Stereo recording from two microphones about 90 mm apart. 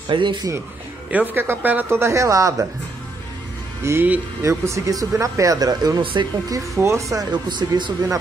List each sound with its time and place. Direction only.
0.1 s speech: 65° right (ahead or behind)
1.1 s speech: 20° right (ahead or behind); by 2.5 s 35° right (ahead or behind)
3.8 s speech: 30° right (ahead or behind); by 6.6 s 50° right (ahead or behind)
6.7 s speech: 35° right (ahead or behind)
7.4 s speech: 55° right (ahead or behind)